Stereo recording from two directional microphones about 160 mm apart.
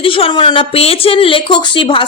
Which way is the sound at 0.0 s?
35° left (ahead or behind).